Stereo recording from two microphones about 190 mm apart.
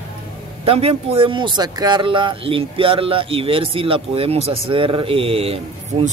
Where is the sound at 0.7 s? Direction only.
30° right (ahead or behind).